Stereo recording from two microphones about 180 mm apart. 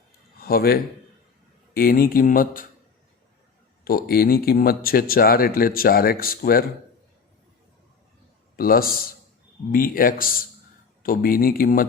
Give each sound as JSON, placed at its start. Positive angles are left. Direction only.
{"t": 0.3, "sound": "speech", "side_deg": 60}
{"t": 3.8, "sound": "speech", "side_deg": 55}
{"t": 8.5, "sound": "speech", "side_deg": 55}